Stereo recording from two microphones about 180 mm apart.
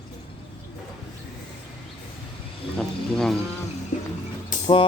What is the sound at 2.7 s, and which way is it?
Speech, 5° left (ahead or behind).